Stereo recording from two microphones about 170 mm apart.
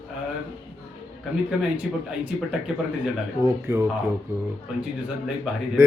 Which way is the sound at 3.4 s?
15° right (ahead or behind).